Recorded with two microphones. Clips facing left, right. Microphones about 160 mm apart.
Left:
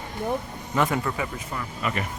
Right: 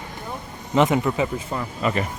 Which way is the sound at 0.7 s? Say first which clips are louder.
Right 6 dB; 20° right (ahead or behind).